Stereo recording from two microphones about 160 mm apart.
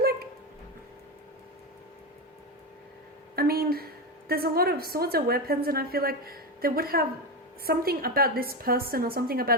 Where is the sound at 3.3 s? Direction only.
70° right (ahead or behind).